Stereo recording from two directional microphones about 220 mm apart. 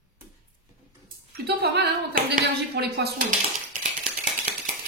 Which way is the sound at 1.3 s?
45° right (ahead or behind).